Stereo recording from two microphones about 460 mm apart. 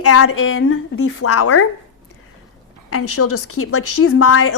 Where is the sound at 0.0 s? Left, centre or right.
Left.